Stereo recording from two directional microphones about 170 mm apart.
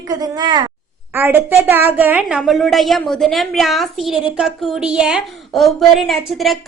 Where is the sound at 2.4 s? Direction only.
Centre (ahead or behind).